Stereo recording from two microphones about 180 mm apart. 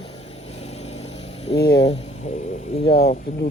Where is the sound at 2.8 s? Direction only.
50° left (ahead or behind).